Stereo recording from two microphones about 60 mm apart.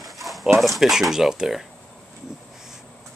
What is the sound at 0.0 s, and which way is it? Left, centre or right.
Dog, centre.